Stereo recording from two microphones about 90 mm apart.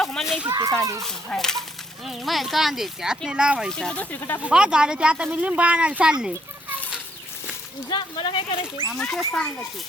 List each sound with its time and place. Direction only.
0.0 s a sound: 5° left (ahead or behind)
0.4 s speech: 45° right (ahead or behind)
1.0 s speech: 5° left (ahead or behind); by 3.7 s 10° right (ahead or behind)
3.7 s speech: 10° left (ahead or behind)
4.4 s speech: 10° right (ahead or behind)
7.9 s speech: 60° left (ahead or behind); by 8.6 s 75° left (ahead or behind)
8.9 s speech: 5° left (ahead or behind)